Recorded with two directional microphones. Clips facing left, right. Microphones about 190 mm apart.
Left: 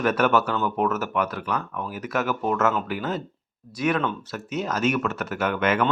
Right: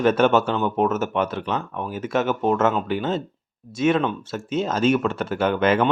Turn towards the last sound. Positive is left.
turn(degrees=-30)  # may be behind; listen again after turning